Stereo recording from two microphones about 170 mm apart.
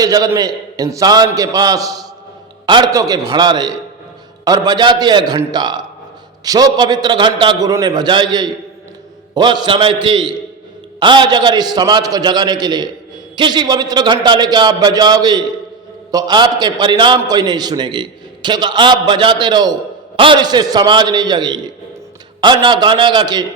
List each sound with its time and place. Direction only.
0.0 s a man's voice: 20° right (ahead or behind)